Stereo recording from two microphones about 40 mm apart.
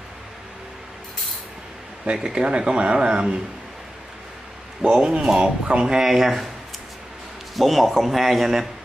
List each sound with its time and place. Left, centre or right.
2.1 s speech: right
4.8 s speech: centre
5.9 s speech: centre
7.5 s a man's voice: centre